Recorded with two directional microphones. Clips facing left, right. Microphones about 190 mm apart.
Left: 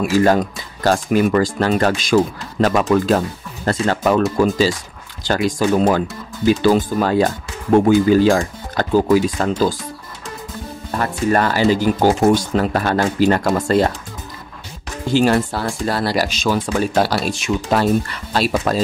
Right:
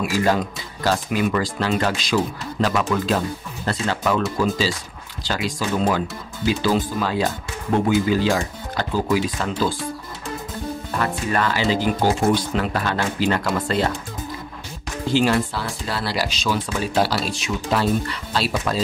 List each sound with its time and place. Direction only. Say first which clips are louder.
0.0 s speech: left 6 dB; 50° left (ahead or behind)
11.0 s speech: left 6 dB; 40° left (ahead or behind)
15.1 s speech: left 4 dB; 45° left (ahead or behind)